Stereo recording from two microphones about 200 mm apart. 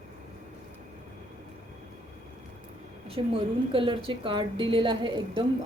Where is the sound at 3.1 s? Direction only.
25° right (ahead or behind).